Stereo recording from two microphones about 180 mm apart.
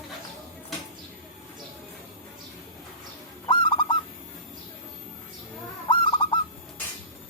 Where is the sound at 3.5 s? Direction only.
25° left (ahead or behind).